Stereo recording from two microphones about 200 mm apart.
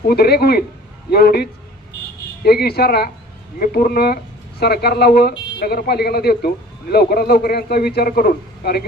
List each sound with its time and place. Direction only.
0.1 s a man's voice: 50° left (ahead or behind)